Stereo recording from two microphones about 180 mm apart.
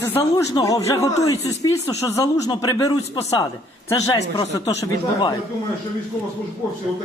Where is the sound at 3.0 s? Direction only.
35° left (ahead or behind).